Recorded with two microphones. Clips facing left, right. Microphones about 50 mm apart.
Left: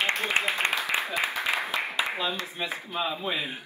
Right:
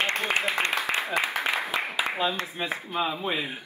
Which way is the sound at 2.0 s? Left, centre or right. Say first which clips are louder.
Right 3 dB; right.